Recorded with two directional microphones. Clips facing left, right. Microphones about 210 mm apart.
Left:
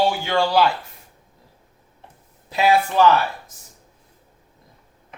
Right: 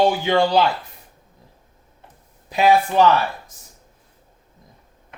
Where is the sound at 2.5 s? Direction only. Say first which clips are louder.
Right 2 dB; 15° right (ahead or behind).